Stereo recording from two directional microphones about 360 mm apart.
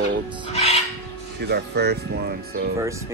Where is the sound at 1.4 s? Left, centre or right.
Right.